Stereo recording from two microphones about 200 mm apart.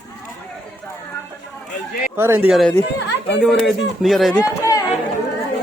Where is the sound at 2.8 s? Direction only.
60° left (ahead or behind).